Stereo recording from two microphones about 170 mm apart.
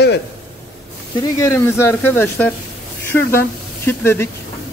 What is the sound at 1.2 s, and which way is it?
Speech, 15° left (ahead or behind).